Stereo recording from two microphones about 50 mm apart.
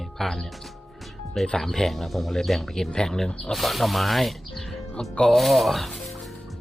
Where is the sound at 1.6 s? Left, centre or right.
Centre.